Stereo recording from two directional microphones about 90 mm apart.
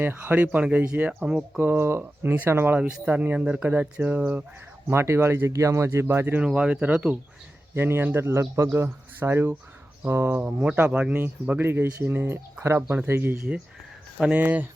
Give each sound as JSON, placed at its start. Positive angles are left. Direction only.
{"t": 0.0, "sound": "speech", "side_deg": -25}
{"t": 1.5, "sound": "speech", "side_deg": -25}
{"t": 2.7, "sound": "speech", "side_deg": -15}
{"t": 4.9, "sound": "speech", "side_deg": -30}
{"t": 6.4, "sound": "speech", "side_deg": -10}
{"t": 7.7, "sound": "speech", "side_deg": -25}
{"t": 10.4, "sound": "speech", "side_deg": -15}
{"t": 14.2, "sound": "speech", "side_deg": -15}